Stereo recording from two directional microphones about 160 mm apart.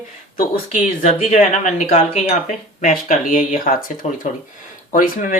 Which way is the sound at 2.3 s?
55° left (ahead or behind).